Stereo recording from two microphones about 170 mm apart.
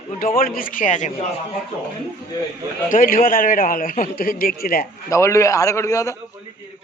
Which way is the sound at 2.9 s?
55° left (ahead or behind).